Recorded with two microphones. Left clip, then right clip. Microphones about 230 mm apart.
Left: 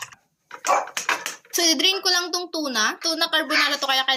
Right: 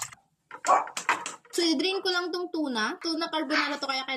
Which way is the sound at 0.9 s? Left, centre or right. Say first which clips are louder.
Left 4 dB; centre.